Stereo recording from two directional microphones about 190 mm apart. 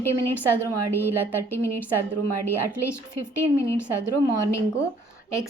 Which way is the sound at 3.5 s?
15° left (ahead or behind).